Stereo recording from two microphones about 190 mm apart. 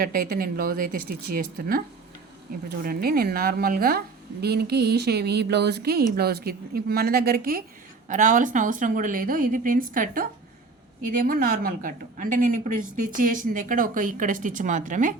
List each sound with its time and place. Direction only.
0.0 s a woman's voice: 50° right (ahead or behind)